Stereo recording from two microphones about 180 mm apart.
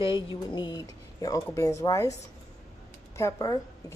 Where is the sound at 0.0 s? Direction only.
25° left (ahead or behind).